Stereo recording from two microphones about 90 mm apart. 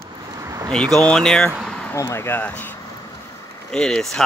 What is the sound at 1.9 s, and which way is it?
Speech, 30° left (ahead or behind).